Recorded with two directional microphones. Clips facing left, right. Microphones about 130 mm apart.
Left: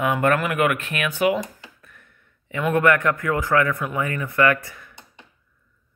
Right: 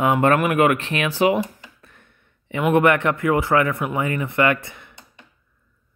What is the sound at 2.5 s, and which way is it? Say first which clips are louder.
Speech: right 2 dB; 25° right (ahead or behind).